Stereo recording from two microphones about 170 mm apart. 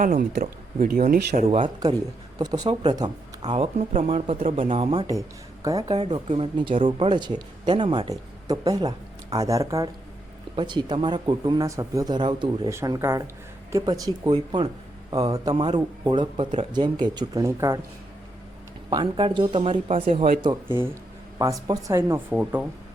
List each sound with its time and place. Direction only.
0.0 s speech: 55° right (ahead or behind)
1.8 s speech: 20° right (ahead or behind)
18.9 s speech: 25° right (ahead or behind); by 20.4 s 40° right (ahead or behind)
20.7 s speech: 15° right (ahead or behind)